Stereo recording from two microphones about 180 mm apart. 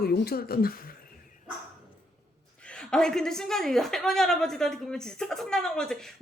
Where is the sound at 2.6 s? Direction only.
5° left (ahead or behind).